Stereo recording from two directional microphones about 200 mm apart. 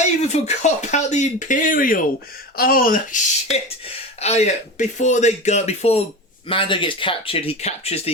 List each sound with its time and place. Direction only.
0.2 s speech: 35° left (ahead or behind)